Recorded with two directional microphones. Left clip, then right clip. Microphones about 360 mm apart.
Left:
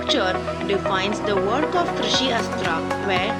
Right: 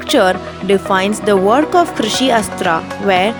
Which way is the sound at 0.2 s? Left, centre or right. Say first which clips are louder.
Right 9 dB; right.